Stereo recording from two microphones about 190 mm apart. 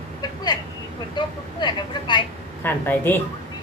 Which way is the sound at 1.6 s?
25° left (ahead or behind).